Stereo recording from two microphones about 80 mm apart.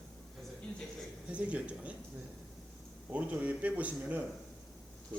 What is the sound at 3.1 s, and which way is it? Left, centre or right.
Speech, centre.